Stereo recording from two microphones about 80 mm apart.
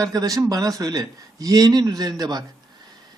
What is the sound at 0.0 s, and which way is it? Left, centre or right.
Speech, right.